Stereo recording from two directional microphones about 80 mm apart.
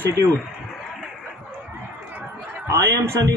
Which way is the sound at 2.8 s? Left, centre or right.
Right.